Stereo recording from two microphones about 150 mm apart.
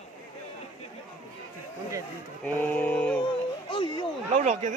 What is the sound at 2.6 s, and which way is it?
Chant, 10° left (ahead or behind).